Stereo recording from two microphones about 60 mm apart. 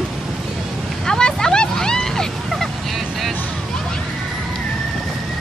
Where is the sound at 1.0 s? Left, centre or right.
Centre.